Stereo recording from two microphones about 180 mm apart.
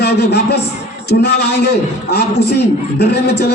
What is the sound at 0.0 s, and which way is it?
A man's voice, 70° left (ahead or behind).